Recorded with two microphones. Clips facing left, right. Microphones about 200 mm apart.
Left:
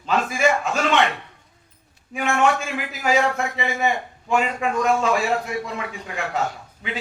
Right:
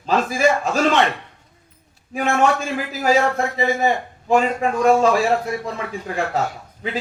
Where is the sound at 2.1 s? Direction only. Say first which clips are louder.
Right 2 dB; 35° right (ahead or behind).